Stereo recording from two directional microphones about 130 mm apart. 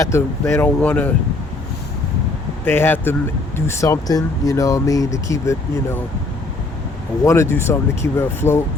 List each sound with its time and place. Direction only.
0.0 s speech: 20° left (ahead or behind)
2.6 s speech: 15° left (ahead or behind)
7.3 s speech: 20° left (ahead or behind)